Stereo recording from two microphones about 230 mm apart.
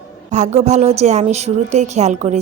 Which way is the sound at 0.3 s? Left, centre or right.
Right.